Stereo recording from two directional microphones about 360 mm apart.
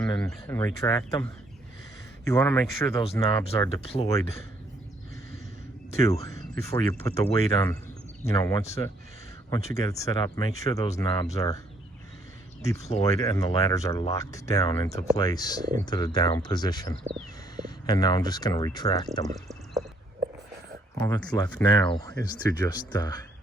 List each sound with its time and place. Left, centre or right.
0.0 s speech: centre
6.0 s speech: centre
12.6 s speech: centre
21.0 s speech: centre